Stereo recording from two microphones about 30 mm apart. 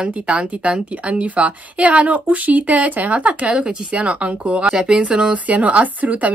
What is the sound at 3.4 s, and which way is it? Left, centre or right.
A woman's voice, right.